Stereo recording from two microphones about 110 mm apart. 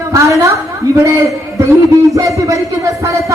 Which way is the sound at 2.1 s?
30° right (ahead or behind).